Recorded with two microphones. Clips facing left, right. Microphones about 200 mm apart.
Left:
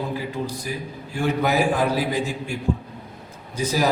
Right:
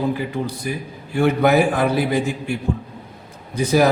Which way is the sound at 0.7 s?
60° right (ahead or behind).